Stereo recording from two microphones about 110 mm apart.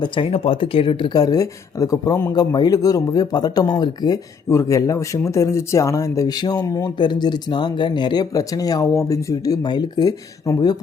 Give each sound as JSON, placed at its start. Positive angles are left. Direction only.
{"t": 0.0, "sound": "speech", "side_deg": 55}
{"t": 4.4, "sound": "speech", "side_deg": 30}